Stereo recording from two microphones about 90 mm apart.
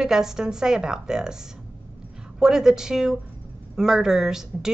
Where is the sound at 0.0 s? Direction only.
5° right (ahead or behind).